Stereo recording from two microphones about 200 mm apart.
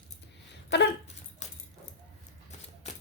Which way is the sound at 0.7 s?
60° left (ahead or behind).